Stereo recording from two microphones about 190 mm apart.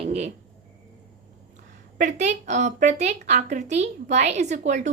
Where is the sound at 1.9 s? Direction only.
40° right (ahead or behind).